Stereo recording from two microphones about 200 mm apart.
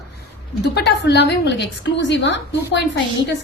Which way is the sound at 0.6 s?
60° left (ahead or behind).